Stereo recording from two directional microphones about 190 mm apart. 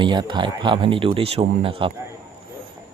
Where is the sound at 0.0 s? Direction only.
25° right (ahead or behind).